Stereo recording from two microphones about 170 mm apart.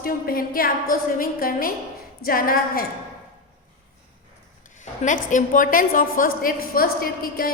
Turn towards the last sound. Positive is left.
turn(degrees=60)  # may be behind; listen again after turning